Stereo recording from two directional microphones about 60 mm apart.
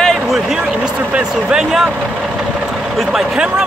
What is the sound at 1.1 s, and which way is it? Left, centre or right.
Speech, centre.